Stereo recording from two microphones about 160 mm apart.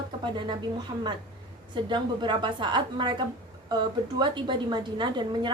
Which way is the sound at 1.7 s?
30° right (ahead or behind).